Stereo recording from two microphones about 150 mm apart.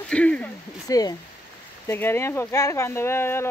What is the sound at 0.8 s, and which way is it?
Speech, 25° left (ahead or behind).